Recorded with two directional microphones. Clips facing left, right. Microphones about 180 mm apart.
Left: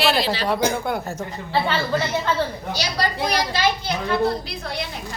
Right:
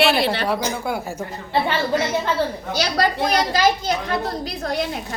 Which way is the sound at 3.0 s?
50° right (ahead or behind).